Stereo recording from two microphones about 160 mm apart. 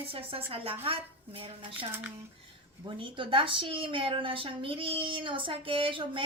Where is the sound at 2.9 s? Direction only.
30° right (ahead or behind).